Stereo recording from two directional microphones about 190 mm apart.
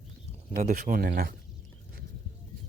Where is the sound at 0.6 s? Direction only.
45° right (ahead or behind).